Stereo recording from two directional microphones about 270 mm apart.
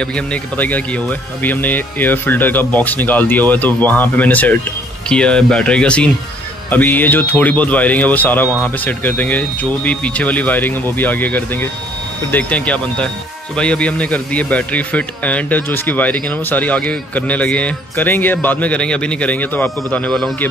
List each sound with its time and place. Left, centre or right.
0.0 s speech: centre